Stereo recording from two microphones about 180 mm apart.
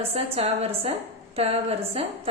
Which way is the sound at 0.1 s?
35° right (ahead or behind).